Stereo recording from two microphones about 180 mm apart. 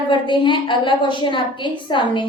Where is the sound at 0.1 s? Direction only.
25° left (ahead or behind).